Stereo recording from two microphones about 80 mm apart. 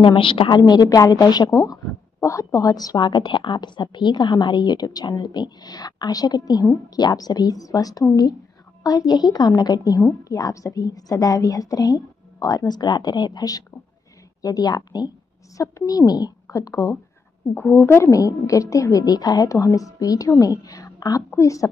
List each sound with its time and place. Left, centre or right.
0.0 s a woman's voice: left
0.8 s a woman's voice: left
1.5 s a woman's voice: left
3.1 s a woman's voice: left
17.6 s a woman's voice: left